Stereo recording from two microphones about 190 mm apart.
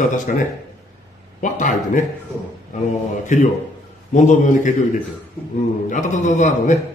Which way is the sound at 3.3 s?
40° left (ahead or behind).